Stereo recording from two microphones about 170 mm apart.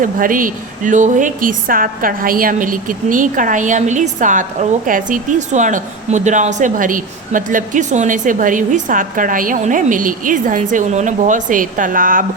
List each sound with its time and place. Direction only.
0.0 s speech: 55° right (ahead or behind)